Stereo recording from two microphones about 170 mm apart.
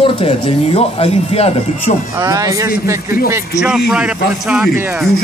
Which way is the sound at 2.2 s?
20° right (ahead or behind).